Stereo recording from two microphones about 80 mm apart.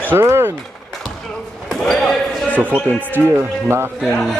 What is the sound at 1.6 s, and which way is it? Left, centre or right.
Basketball bounce, centre.